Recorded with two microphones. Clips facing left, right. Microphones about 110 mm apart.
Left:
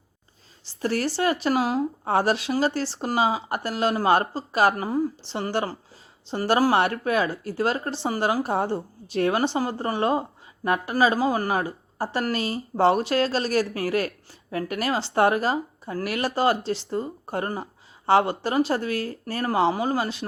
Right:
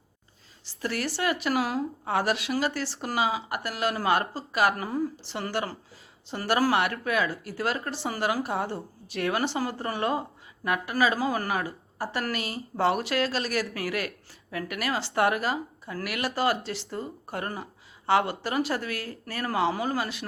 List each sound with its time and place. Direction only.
0.6 s a woman's voice: 30° left (ahead or behind)